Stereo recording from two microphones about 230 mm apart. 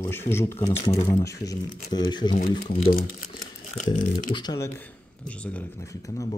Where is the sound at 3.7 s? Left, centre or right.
Left.